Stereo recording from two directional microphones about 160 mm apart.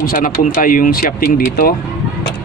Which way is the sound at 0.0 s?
60° left (ahead or behind).